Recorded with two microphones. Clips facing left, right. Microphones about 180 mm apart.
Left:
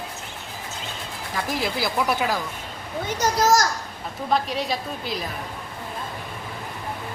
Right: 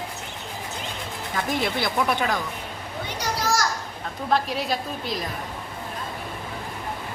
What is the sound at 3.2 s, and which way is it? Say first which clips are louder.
Speech: left 6 dB; 45° left (ahead or behind).